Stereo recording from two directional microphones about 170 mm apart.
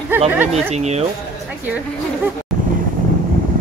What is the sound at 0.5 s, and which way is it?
Speech, 40° right (ahead or behind).